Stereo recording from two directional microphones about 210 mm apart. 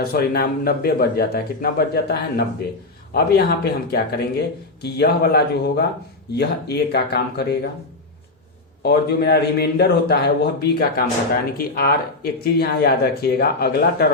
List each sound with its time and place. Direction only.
0.0 s speech: 45° left (ahead or behind)
8.8 s speech: 50° left (ahead or behind)